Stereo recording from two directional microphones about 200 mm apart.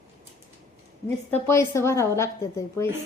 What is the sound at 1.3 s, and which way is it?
Speech, 15° left (ahead or behind).